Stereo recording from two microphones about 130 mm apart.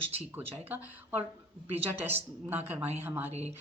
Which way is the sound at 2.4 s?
15° right (ahead or behind).